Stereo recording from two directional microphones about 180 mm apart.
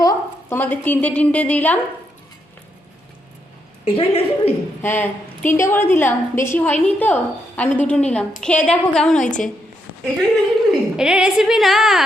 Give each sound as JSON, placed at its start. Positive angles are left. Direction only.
{"t": 0.0, "sound": "a woman's voice", "side_deg": 15}
{"t": 3.8, "sound": "a woman's voice", "side_deg": 30}
{"t": 4.8, "sound": "a woman's voice", "side_deg": 10}
{"t": 9.2, "sound": "a woman's voice", "side_deg": 45}
{"t": 10.7, "sound": "a woman's voice", "side_deg": -5}